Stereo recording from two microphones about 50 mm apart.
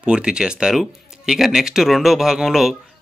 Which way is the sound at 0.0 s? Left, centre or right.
Centre.